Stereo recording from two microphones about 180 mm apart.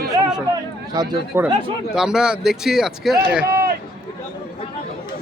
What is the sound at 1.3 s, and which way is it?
A man's voice, 15° right (ahead or behind).